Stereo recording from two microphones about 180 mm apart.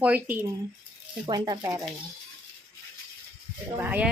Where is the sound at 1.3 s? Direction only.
20° right (ahead or behind).